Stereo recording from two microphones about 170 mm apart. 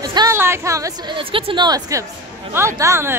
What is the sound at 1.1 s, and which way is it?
Speech, 30° right (ahead or behind).